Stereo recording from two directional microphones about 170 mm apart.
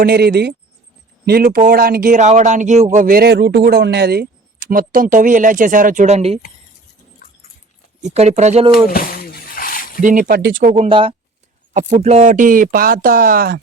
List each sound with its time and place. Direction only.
0.0 s speech: 65° right (ahead or behind)
2.1 s speech: 45° right (ahead or behind)
8.0 s speech: 40° right (ahead or behind)
8.7 s a sound: 60° left (ahead or behind)
10.0 s speech: 50° right (ahead or behind)
10.8 s speech: 30° right (ahead or behind)
11.7 s speech: 45° right (ahead or behind)